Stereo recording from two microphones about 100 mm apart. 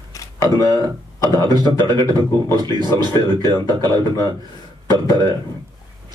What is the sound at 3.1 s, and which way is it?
Speech, 40° left (ahead or behind).